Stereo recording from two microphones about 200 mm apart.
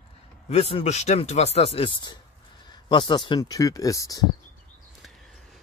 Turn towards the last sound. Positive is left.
turn(degrees=15)  # may be behind; listen again after turning